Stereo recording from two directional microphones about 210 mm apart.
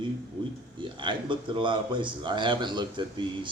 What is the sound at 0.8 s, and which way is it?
A man's voice, 25° right (ahead or behind).